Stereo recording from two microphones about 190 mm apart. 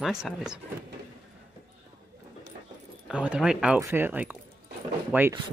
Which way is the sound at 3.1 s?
5° right (ahead or behind).